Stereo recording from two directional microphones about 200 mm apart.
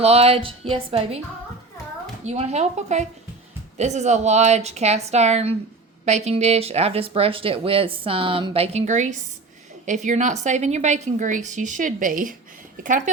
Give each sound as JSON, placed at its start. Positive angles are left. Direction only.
{"t": 0.0, "sound": "speech", "side_deg": -30}
{"t": 2.2, "sound": "a woman's voice", "side_deg": -30}